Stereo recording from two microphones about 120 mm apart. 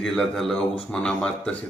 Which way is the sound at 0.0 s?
5° left (ahead or behind).